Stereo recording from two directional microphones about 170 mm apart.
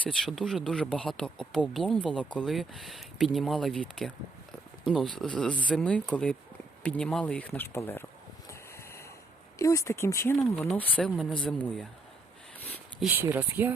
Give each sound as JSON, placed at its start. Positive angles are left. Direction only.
{"t": 0.0, "sound": "speech", "side_deg": 0}
{"t": 8.4, "sound": "a sound", "side_deg": 15}
{"t": 9.6, "sound": "speech", "side_deg": 20}
{"t": 13.1, "sound": "speech", "side_deg": -10}